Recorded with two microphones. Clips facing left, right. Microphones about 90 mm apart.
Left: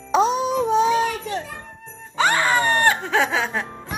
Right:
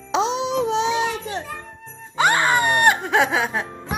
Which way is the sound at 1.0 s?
20° right (ahead or behind).